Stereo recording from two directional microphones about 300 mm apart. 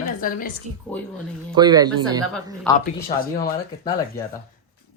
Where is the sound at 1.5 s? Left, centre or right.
Centre.